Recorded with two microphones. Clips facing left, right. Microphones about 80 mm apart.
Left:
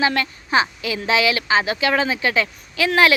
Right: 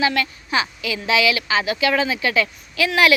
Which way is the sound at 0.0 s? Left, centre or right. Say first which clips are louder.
Even; left.